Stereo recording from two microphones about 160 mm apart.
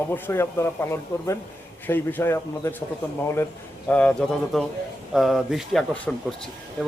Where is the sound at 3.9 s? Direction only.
5° left (ahead or behind).